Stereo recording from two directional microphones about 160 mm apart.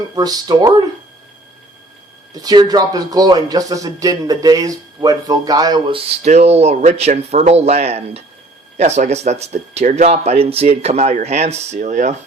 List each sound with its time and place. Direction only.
0.2 s a man's voice: 25° right (ahead or behind)
2.3 s a man's voice: 25° right (ahead or behind)
6.2 s speech: 45° right (ahead or behind)